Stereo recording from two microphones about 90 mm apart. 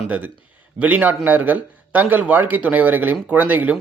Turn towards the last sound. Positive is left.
turn(degrees=-20)  # may be behind; listen again after turning